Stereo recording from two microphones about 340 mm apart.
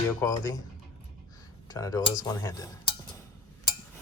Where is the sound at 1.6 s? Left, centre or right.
Centre.